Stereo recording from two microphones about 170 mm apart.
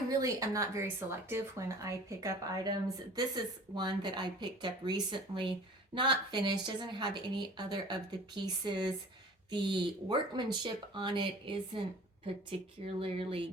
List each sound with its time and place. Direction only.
0.1 s speech: 20° right (ahead or behind)
13.0 s speech: 35° right (ahead or behind)